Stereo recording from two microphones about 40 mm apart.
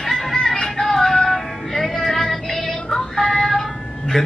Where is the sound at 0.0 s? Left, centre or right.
Centre.